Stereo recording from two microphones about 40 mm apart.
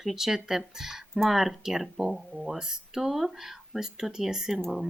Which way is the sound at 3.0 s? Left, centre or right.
Centre.